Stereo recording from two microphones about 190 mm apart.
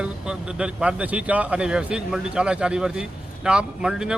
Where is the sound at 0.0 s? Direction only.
5° right (ahead or behind).